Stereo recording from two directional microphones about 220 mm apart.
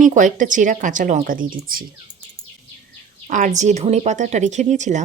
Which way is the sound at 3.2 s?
35° right (ahead or behind).